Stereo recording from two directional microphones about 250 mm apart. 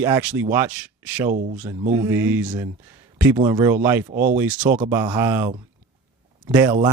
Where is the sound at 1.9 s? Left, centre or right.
Centre.